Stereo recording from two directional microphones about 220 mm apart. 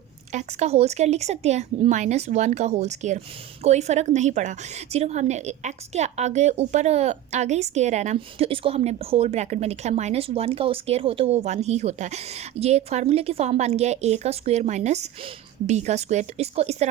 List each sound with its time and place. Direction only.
0.3 s a woman's voice: 30° right (ahead or behind)